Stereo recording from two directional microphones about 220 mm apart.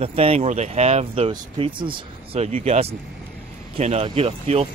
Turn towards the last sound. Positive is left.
turn(degrees=-25)  # may be behind; listen again after turning